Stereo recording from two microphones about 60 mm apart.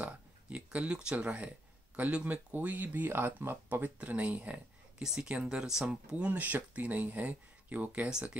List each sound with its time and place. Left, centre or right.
0.0 s a sound: centre
2.0 s speech: right
4.0 s speech: right
5.0 s speech: centre; by 8.1 s right
8.1 s speech: centre